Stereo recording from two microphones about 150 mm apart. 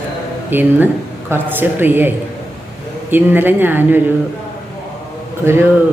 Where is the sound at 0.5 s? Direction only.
10° right (ahead or behind).